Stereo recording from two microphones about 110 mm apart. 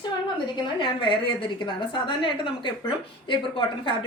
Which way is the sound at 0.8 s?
50° left (ahead or behind).